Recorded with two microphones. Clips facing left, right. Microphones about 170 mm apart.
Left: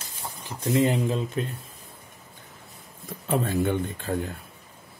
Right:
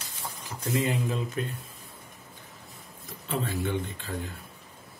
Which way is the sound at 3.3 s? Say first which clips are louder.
Left 6 dB; 50° left (ahead or behind).